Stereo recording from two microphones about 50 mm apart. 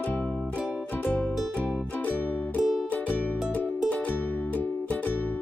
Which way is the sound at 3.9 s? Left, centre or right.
Left.